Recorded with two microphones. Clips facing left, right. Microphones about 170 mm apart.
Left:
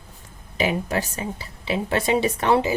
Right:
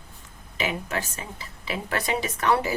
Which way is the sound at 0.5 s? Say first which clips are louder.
Left 5 dB; 35° left (ahead or behind).